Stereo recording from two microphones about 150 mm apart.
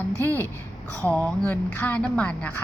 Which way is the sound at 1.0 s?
10° left (ahead or behind).